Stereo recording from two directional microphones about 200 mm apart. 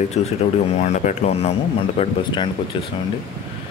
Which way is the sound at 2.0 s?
25° left (ahead or behind).